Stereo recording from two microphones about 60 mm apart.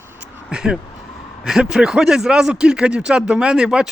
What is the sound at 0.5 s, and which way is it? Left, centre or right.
Speech, centre.